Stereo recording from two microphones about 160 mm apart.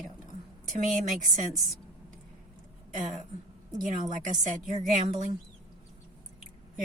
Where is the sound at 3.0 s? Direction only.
50° right (ahead or behind).